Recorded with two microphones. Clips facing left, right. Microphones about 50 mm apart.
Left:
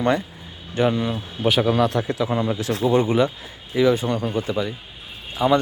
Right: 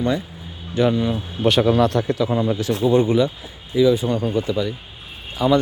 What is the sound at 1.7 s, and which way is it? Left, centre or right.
Speech, left.